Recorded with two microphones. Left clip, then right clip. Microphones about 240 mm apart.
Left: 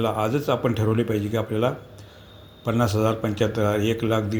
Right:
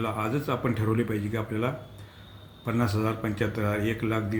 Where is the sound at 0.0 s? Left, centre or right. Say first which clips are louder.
Left 6 dB; centre.